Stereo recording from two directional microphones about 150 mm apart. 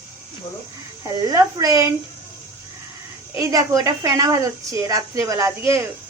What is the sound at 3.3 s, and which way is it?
A woman's voice, 25° right (ahead or behind).